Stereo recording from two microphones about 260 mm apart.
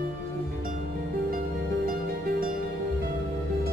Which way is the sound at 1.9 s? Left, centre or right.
Right.